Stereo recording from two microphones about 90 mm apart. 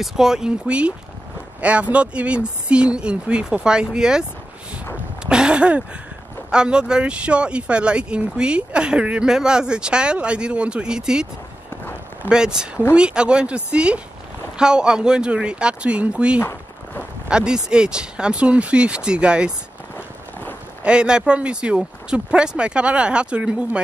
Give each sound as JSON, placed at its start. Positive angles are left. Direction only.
{"t": 0.0, "sound": "speech", "side_deg": -5}
{"t": 5.2, "sound": "a sound", "side_deg": -10}
{"t": 6.5, "sound": "speech", "side_deg": -10}
{"t": 12.3, "sound": "speech", "side_deg": -10}
{"t": 16.3, "sound": "a sound", "side_deg": 30}
{"t": 17.3, "sound": "speech", "side_deg": -10}
{"t": 20.8, "sound": "speech", "side_deg": -10}